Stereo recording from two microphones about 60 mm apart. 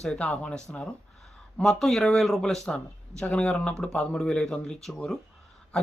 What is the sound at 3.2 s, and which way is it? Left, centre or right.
Speech, left.